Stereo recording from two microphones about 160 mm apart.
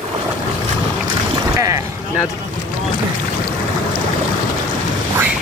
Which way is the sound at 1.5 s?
20° right (ahead or behind).